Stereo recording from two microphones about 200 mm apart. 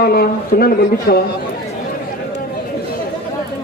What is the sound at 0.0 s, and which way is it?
A man's voice, 50° left (ahead or behind).